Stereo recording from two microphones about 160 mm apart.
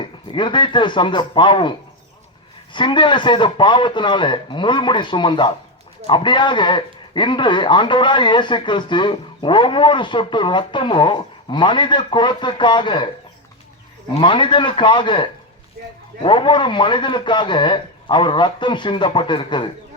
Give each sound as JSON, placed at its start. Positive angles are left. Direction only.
{"t": 0.0, "sound": "speech", "side_deg": 30}
{"t": 2.7, "sound": "speech", "side_deg": 30}
{"t": 14.1, "sound": "a man's voice", "side_deg": 30}